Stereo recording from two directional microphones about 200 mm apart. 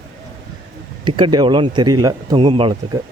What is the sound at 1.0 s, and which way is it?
Speech, 25° right (ahead or behind).